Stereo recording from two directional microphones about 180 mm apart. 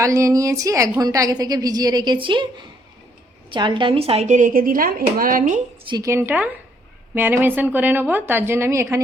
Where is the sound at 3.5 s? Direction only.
25° right (ahead or behind); by 5.6 s 50° right (ahead or behind).